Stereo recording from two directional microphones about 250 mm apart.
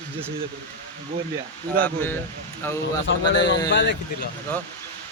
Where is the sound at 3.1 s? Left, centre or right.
Left.